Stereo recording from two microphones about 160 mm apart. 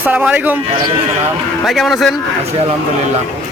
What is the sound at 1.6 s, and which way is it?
Speech, centre (ahead or behind).